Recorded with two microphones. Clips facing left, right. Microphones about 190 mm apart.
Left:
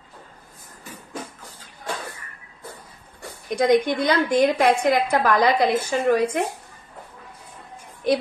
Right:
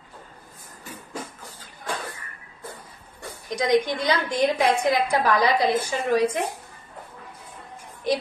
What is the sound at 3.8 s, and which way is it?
A woman's voice, 55° left (ahead or behind).